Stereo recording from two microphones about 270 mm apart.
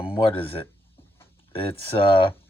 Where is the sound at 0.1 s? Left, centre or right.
Centre.